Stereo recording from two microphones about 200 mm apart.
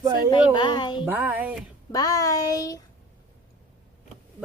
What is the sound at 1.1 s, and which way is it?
Speech, 10° right (ahead or behind).